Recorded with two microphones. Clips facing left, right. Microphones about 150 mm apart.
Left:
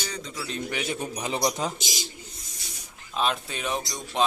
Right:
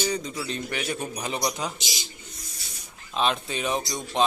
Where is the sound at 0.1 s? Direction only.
15° right (ahead or behind).